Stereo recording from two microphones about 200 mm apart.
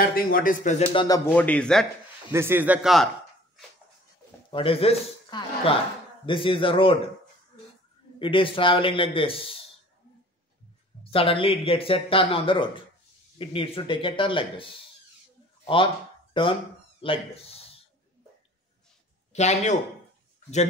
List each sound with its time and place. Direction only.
0.0 s speech: 45° left (ahead or behind)
0.9 s speech: 20° left (ahead or behind)
2.3 s a man's voice: 10° right (ahead or behind)
4.5 s speech: 25° left (ahead or behind)
8.2 s speech: 25° left (ahead or behind)
11.1 s speech: 25° left (ahead or behind)
19.3 s a man's voice: 35° left (ahead or behind)